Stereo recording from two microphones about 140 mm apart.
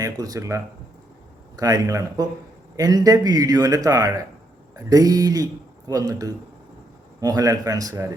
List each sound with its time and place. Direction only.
0.0 s a man's voice: 25° right (ahead or behind)